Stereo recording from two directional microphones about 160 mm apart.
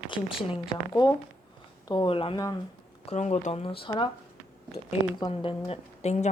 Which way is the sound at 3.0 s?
45° left (ahead or behind).